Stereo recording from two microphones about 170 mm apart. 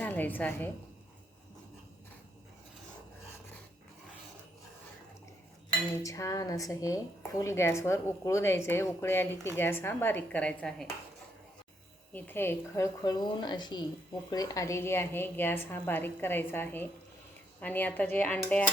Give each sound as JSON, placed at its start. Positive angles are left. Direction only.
{"t": 0.0, "sound": "a woman's voice", "side_deg": 10}
{"t": 6.0, "sound": "a woman's voice", "side_deg": 20}
{"t": 12.1, "sound": "a woman's voice", "side_deg": 15}